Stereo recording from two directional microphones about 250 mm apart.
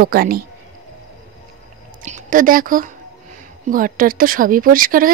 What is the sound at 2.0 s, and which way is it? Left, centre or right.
A woman's voice, right.